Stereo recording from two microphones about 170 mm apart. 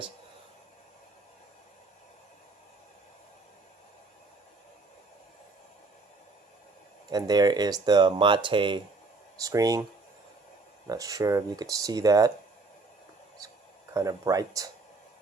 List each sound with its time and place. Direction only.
7.1 s speech: 25° right (ahead or behind)
10.8 s speech: 20° right (ahead or behind)
13.9 s speech: 20° right (ahead or behind)